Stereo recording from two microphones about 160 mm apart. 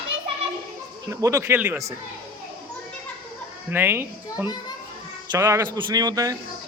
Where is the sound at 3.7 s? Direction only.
15° right (ahead or behind).